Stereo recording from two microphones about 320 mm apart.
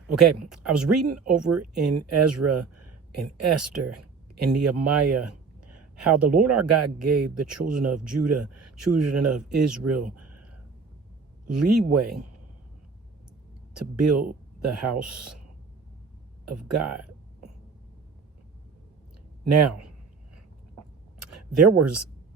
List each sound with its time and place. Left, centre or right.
0.2 s speech: right
11.4 s speech: right
14.0 s speech: right
16.7 s speech: right
19.5 s speech: right
20.3 s a sound: right